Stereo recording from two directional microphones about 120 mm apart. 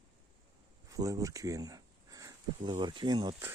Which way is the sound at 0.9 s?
30° right (ahead or behind).